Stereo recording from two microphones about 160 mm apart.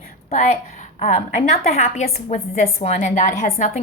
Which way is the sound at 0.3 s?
45° left (ahead or behind).